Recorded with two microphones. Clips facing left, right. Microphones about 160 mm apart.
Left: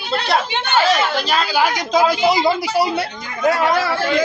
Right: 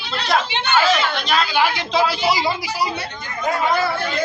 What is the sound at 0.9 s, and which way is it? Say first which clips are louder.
A woman's voice: left 2 dB; 35° left (ahead or behind).